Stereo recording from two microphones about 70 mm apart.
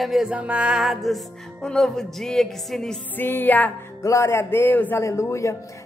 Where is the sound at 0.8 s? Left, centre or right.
Centre.